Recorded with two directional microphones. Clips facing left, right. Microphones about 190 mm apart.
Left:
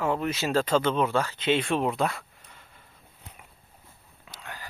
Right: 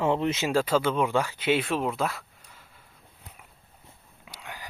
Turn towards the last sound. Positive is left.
turn(degrees=-15)  # may be behind; listen again after turning